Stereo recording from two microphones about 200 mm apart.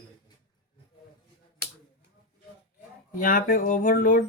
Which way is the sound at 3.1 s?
45° left (ahead or behind).